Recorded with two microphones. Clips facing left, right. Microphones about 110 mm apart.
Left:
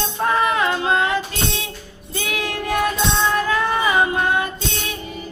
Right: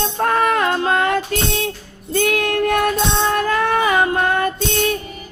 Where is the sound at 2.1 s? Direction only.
55° right (ahead or behind).